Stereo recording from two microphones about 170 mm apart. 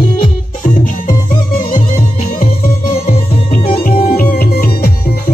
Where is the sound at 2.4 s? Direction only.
55° left (ahead or behind).